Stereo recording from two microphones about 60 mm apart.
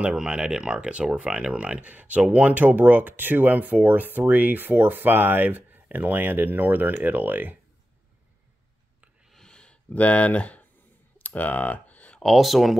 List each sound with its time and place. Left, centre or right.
0.0 s speech: centre; by 7.5 s right
9.3 s a sound: centre
12.2 s speech: centre